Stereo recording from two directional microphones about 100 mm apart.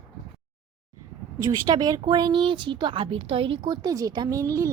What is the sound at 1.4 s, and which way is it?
Speech, 40° right (ahead or behind).